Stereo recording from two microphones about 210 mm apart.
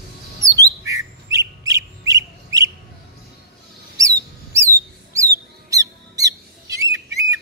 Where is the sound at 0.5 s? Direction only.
15° right (ahead or behind).